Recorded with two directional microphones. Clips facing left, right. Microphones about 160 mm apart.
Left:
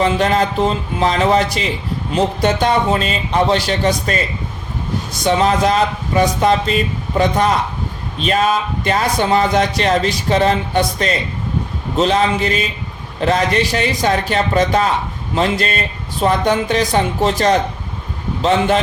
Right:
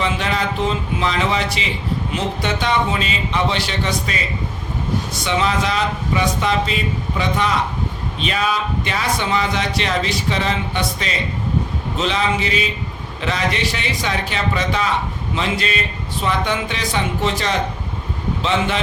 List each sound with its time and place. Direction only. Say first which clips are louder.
0.0 s speech: left 6 dB; 45° left (ahead or behind)
5.2 s speech: left 7 dB; 40° left (ahead or behind)